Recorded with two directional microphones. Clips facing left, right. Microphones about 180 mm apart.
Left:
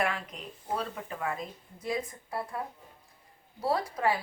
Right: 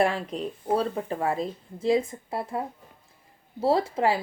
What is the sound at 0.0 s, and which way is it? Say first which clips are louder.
A woman's voice: right 8 dB; 30° right (ahead or behind).